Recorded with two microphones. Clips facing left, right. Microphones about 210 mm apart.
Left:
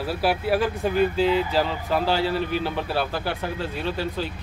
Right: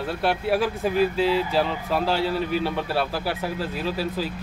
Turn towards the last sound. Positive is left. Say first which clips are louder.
# right 1 dB
turn(degrees=-5)  # may be behind; listen again after turning